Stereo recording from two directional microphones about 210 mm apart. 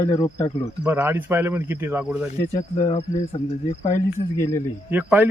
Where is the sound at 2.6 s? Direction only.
30° left (ahead or behind).